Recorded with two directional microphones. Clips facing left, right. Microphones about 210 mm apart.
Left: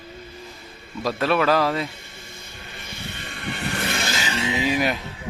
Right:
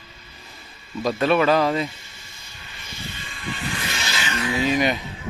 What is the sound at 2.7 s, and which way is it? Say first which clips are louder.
Vehicle: even; 55° left (ahead or behind).